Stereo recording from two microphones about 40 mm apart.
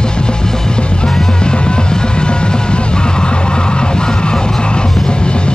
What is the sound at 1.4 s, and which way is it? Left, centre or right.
Music, left.